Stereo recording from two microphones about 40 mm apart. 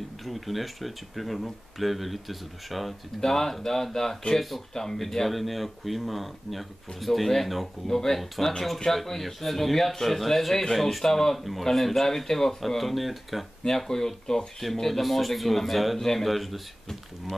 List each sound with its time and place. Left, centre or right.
0.2 s speech: centre
3.2 s speech: centre
13.7 s speech: centre